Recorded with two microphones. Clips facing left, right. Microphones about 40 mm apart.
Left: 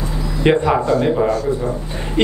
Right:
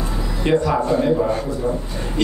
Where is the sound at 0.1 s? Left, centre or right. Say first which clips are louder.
Left 2 dB; centre.